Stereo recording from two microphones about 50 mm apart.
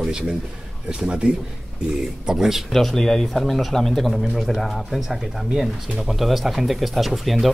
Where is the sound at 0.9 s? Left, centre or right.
Centre.